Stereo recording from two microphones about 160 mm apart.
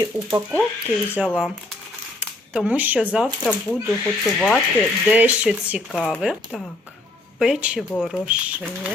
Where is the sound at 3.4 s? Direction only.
5° left (ahead or behind).